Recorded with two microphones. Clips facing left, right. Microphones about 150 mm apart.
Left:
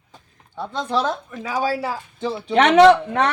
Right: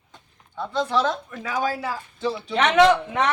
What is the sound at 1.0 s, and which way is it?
Speech, 10° left (ahead or behind).